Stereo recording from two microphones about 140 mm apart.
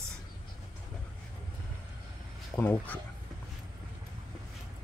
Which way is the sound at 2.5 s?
15° left (ahead or behind).